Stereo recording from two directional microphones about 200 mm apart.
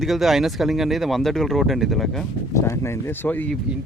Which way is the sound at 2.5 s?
15° left (ahead or behind).